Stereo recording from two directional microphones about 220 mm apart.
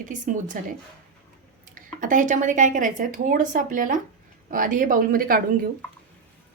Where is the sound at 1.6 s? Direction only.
35° right (ahead or behind).